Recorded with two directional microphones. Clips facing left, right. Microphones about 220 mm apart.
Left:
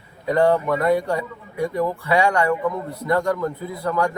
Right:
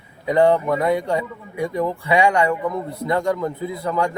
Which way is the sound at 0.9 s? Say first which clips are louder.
Even; 20° right (ahead or behind).